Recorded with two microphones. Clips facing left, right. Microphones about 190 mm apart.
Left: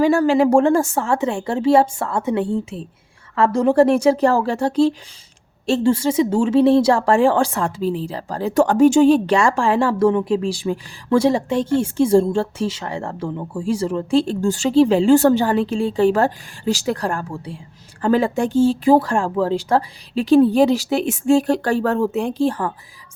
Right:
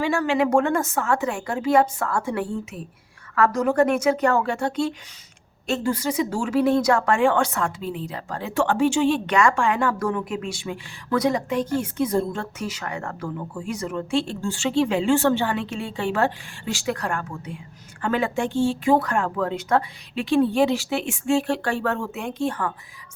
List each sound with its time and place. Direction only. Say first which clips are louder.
0.0 s a woman's voice: left 7 dB; 35° left (ahead or behind)